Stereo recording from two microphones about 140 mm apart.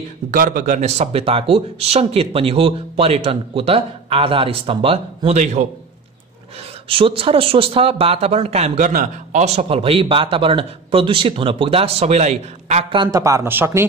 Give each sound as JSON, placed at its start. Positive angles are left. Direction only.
{"t": 0.3, "sound": "speech", "side_deg": -75}
{"t": 6.9, "sound": "speech", "side_deg": -40}
{"t": 13.1, "sound": "speech", "side_deg": -25}